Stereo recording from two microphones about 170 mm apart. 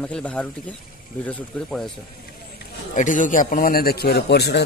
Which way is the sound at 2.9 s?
50° left (ahead or behind).